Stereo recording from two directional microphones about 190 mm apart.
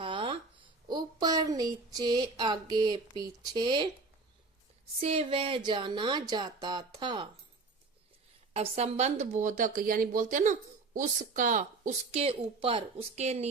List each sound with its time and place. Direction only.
0.0 s a sound: 25° right (ahead or behind)
0.9 s speech: 20° right (ahead or behind)
4.9 s speech: 30° right (ahead or behind)
8.5 s speech: 35° right (ahead or behind)